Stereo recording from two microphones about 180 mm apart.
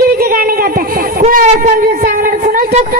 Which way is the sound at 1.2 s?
40° right (ahead or behind).